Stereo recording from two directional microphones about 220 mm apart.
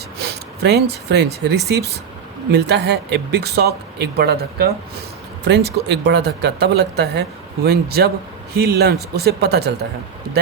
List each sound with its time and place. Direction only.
0.2 s speech: 50° right (ahead or behind)
5.7 s speech: 50° right (ahead or behind)